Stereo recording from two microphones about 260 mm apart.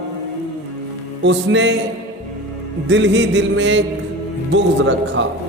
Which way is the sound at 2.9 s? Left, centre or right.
Right.